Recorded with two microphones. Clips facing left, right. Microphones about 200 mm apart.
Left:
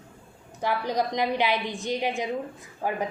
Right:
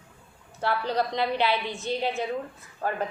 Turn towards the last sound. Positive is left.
turn(degrees=15)  # may be behind; listen again after turning